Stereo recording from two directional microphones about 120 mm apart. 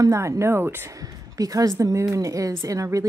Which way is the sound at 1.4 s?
30° right (ahead or behind).